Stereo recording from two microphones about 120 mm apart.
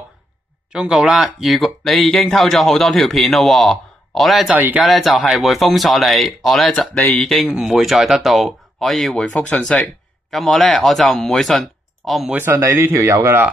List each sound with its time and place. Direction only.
0.7 s speech: 5° right (ahead or behind)
4.6 s speech: 15° right (ahead or behind)
4.8 s speech: centre (ahead or behind)
12.4 s speech: 15° right (ahead or behind)